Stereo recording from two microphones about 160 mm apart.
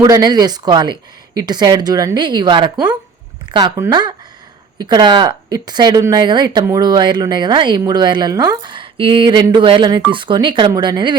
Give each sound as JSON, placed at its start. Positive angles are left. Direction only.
{"t": 0.0, "sound": "speech", "side_deg": -25}